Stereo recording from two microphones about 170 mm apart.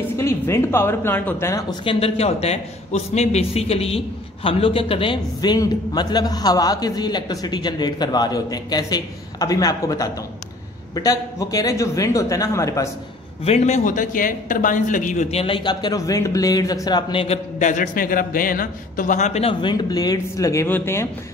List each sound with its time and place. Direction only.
0.2 s speech: 15° left (ahead or behind)
1.9 s speech: 35° left (ahead or behind); by 12.9 s 20° left (ahead or behind)
13.4 s a man's voice: 40° left (ahead or behind)
15.4 s speech: 30° left (ahead or behind)
17.6 s a man's voice: 50° left (ahead or behind); by 21.1 s 15° left (ahead or behind)